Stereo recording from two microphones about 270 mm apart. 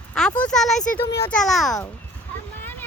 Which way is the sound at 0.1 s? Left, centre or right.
Centre.